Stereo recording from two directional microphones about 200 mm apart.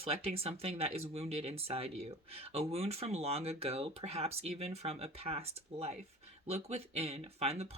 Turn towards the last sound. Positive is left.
turn(degrees=-30)  # may be behind; listen again after turning